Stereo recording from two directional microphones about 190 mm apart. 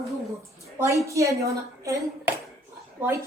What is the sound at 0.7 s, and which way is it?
A woman's voice, 15° right (ahead or behind).